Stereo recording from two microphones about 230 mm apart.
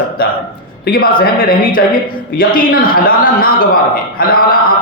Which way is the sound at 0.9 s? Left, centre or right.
Left.